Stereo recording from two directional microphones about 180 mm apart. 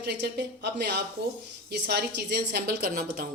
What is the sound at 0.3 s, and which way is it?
A woman's voice, 65° right (ahead or behind).